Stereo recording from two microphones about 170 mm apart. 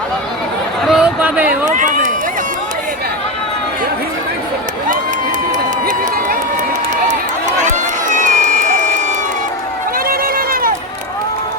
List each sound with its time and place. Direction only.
0.9 s a sound: 5° right (ahead or behind)
1.5 s run: 50° right (ahead or behind)
8.1 s crowd: 50° right (ahead or behind)
10.1 s run: 60° right (ahead or behind)